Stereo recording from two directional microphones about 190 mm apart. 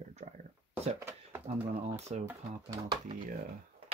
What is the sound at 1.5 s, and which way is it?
Speech, 35° right (ahead or behind).